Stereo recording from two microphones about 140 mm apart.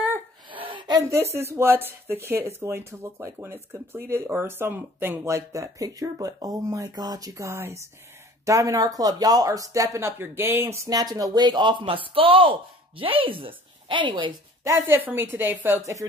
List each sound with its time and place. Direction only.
0.5 s speech: 35° right (ahead or behind)
14.6 s a woman's voice: 20° right (ahead or behind)